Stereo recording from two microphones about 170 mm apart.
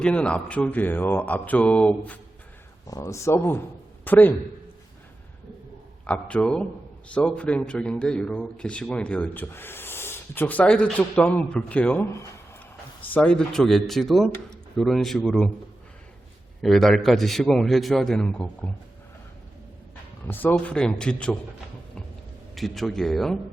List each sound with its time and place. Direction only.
0.0 s a man's voice: 5° left (ahead or behind)
2.8 s a man's voice: 20° left (ahead or behind)
6.1 s a man's voice: 5° left (ahead or behind)
16.6 s a man's voice: centre (ahead or behind)
20.2 s a man's voice: 10° left (ahead or behind)
22.5 s a man's voice: centre (ahead or behind)